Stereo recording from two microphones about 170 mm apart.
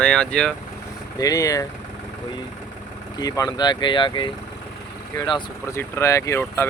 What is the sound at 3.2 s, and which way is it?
Speech, 20° left (ahead or behind).